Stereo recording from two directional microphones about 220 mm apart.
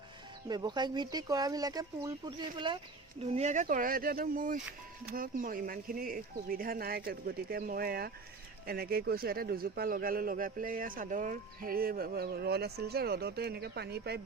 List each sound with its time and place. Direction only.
0.4 s a man's voice: 20° right (ahead or behind); by 14.2 s 45° right (ahead or behind)